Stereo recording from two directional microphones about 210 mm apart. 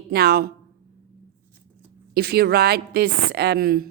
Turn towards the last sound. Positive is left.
turn(degrees=-45)  # may be behind; listen again after turning